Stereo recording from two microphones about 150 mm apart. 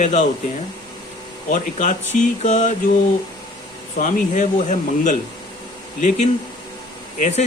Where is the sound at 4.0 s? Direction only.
55° left (ahead or behind).